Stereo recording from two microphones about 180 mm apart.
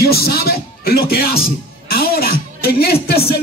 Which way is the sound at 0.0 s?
60° left (ahead or behind).